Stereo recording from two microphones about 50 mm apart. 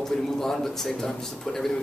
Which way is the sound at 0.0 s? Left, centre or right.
Centre.